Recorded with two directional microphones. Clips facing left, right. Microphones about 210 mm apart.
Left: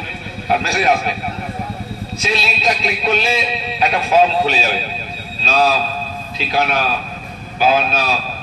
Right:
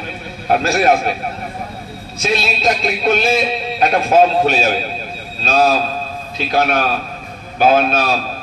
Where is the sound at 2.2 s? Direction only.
50° right (ahead or behind).